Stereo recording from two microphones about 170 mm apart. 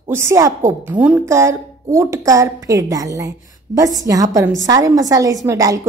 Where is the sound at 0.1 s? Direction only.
15° right (ahead or behind).